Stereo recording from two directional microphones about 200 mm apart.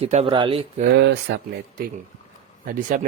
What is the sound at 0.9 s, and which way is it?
Speech, 60° right (ahead or behind).